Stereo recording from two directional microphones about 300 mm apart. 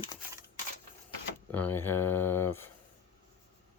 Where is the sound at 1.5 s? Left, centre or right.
Centre.